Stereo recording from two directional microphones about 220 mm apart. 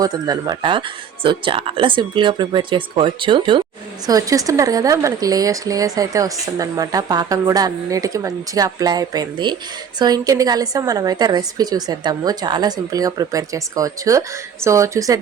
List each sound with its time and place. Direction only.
0.0 s speech: 20° right (ahead or behind)